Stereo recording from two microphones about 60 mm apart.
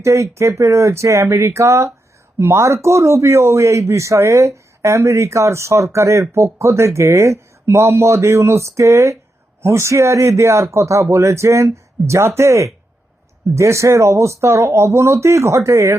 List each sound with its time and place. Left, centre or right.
0.0 s a man's voice: right